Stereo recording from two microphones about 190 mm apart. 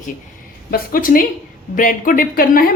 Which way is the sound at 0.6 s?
50° left (ahead or behind).